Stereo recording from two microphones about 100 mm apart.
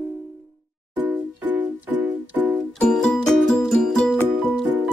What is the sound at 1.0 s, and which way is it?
Music, 20° right (ahead or behind).